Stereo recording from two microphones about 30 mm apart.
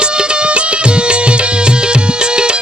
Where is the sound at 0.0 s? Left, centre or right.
Right.